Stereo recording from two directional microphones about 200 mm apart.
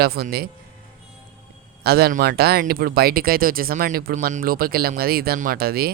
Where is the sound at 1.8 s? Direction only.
50° right (ahead or behind).